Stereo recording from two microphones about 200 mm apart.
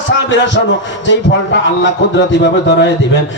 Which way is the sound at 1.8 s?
65° left (ahead or behind).